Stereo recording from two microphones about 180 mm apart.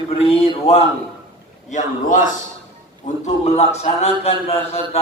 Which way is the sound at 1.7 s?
45° left (ahead or behind).